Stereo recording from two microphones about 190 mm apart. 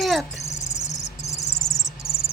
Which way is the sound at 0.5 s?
15° left (ahead or behind).